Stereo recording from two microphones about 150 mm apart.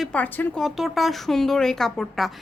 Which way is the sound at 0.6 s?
Centre (ahead or behind).